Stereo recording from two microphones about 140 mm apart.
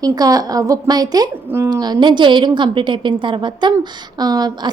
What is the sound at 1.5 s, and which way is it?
Speech, 15° right (ahead or behind).